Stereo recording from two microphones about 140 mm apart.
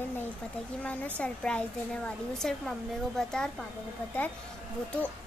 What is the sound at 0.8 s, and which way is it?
Speech, 10° left (ahead or behind).